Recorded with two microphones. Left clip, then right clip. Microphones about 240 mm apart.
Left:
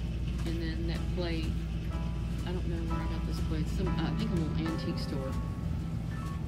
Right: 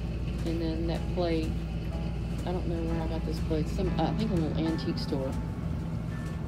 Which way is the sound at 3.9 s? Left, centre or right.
Centre.